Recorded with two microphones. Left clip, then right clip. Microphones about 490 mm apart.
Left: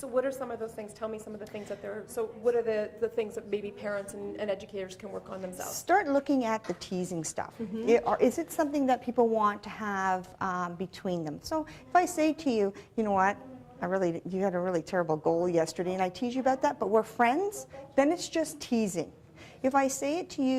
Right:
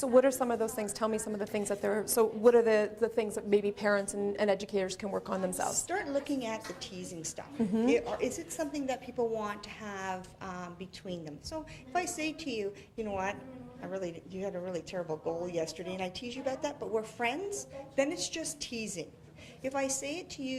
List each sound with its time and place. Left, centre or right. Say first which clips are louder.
0.0 s a woman's voice: right 5 dB; right
5.7 s a woman's voice: left 8 dB; left